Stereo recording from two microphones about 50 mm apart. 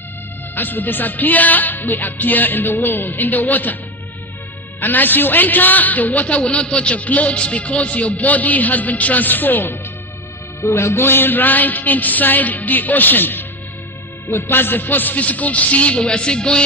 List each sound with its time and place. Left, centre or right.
0.6 s a man's voice: left
4.7 s a man's voice: left
10.6 s music: left
11.0 s a man's voice: left; by 16.6 s centre